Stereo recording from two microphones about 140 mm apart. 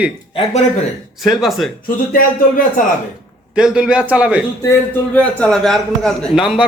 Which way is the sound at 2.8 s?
70° left (ahead or behind).